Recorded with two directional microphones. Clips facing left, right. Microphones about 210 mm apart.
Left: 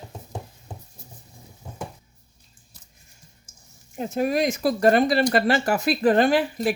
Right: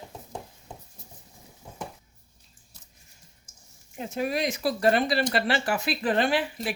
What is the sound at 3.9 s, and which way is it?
Speech, 45° left (ahead or behind).